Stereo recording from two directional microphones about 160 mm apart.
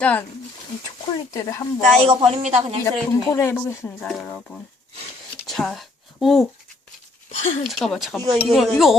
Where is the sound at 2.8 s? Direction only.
15° left (ahead or behind); by 6.4 s centre (ahead or behind).